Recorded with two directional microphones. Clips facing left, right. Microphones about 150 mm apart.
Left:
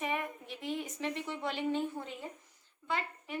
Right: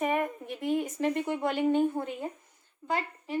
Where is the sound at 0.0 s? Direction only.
50° right (ahead or behind).